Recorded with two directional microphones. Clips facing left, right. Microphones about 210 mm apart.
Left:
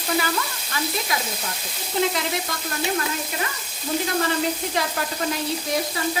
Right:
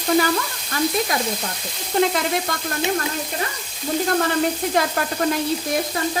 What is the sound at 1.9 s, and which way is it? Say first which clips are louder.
Sizzle: right 4 dB; 55° right (ahead or behind).